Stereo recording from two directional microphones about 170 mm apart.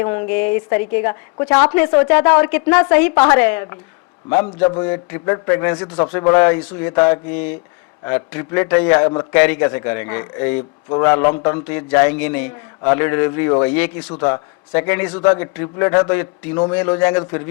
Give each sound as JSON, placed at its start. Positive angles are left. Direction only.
{"t": 0.0, "sound": "a woman's voice", "side_deg": 15}